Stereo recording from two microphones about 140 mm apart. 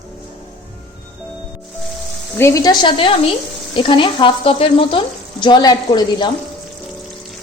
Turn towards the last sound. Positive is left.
turn(degrees=30)  # may be behind; listen again after turning